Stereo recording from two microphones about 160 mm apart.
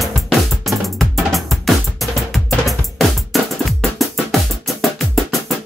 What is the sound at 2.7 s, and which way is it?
Music, centre (ahead or behind).